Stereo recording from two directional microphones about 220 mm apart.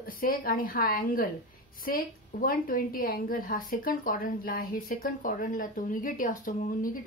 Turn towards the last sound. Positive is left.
turn(degrees=40)  # may be behind; listen again after turning